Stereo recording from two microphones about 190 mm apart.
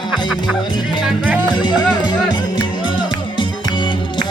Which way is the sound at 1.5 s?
25° left (ahead or behind).